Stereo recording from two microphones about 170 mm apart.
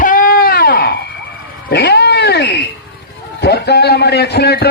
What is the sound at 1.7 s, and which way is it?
Cat, 70° left (ahead or behind).